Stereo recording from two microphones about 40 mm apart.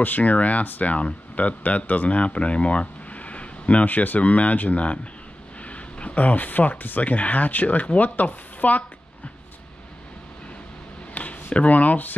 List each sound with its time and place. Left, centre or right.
0.0 s speech: left
3.8 s speech: left
11.1 s speech: left